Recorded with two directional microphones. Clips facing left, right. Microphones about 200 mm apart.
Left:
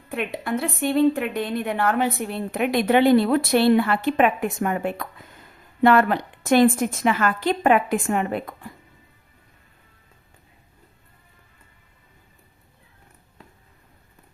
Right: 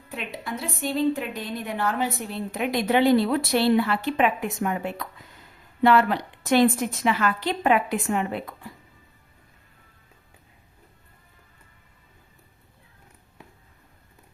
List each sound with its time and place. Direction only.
0.1 s a woman's voice: 60° left (ahead or behind)